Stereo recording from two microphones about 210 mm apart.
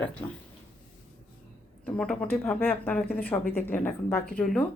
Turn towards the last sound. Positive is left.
turn(degrees=5)  # may be behind; listen again after turning